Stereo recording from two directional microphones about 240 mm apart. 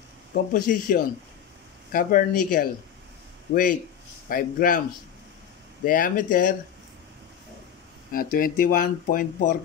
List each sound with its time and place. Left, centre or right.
0.3 s speech: left
4.3 s speech: left
5.9 s speech: left
8.1 s speech: left